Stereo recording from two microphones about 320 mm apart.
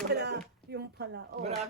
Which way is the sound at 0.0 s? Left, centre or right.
Right.